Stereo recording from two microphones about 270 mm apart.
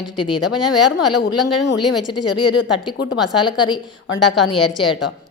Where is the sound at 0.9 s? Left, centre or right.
Left.